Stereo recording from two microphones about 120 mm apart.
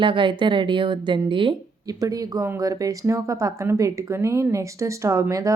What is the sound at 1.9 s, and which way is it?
Speech, 30° right (ahead or behind).